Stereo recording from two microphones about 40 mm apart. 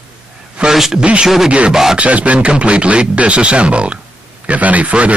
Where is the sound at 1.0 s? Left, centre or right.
Right.